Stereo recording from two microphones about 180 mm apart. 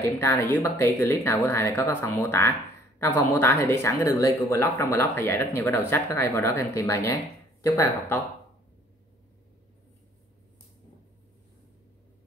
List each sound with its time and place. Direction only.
0.0 s speech: 15° left (ahead or behind)